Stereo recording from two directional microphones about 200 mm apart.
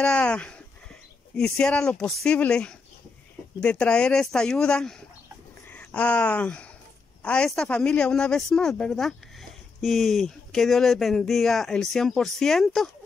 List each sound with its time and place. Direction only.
0.0 s speech: 5° left (ahead or behind)